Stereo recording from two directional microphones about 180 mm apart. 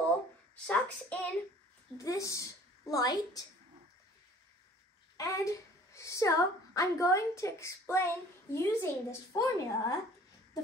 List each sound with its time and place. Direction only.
0.7 s a woman's voice: 5° left (ahead or behind)
5.1 s a woman's voice: 15° left (ahead or behind)